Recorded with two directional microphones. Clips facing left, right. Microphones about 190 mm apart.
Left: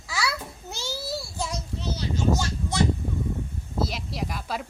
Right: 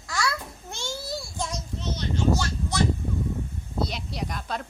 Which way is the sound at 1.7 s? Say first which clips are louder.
Even; 30° left (ahead or behind).